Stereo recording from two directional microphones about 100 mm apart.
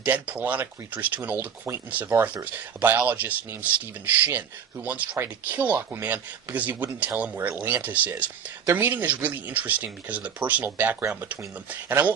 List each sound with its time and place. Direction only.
0.0 s speech: 15° right (ahead or behind)